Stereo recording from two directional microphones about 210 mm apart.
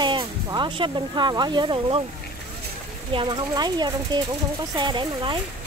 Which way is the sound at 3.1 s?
25° right (ahead or behind).